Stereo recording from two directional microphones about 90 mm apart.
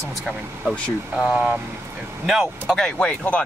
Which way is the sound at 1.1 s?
15° right (ahead or behind).